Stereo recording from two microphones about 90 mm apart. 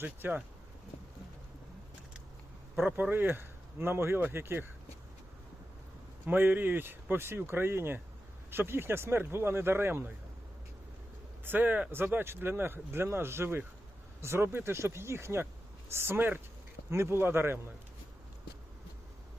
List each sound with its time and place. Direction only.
0.0 s speech: 20° right (ahead or behind)
2.7 s speech: 20° right (ahead or behind)
6.2 s speech: 20° right (ahead or behind)
11.4 s speech: 20° right (ahead or behind)